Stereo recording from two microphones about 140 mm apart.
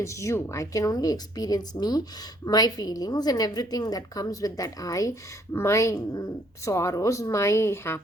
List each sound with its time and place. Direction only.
0.0 s speech: 20° left (ahead or behind)